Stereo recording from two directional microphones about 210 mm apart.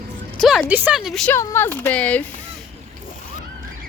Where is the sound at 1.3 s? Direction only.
10° left (ahead or behind).